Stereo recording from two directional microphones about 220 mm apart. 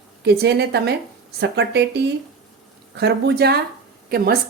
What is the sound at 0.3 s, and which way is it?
Speech, 45° right (ahead or behind).